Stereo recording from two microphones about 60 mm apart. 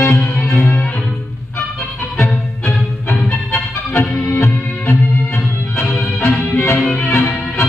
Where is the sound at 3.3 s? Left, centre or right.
Left.